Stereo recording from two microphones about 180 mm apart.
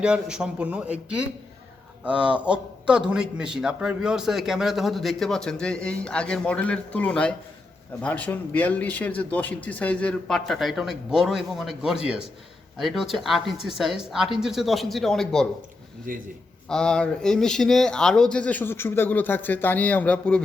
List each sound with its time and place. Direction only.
0.0 s speech: 5° right (ahead or behind)
16.1 s a man's voice: 50° right (ahead or behind)
16.6 s speech: 5° left (ahead or behind)